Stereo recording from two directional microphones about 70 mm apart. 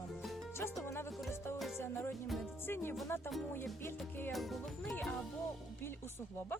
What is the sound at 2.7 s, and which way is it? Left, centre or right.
Music, left.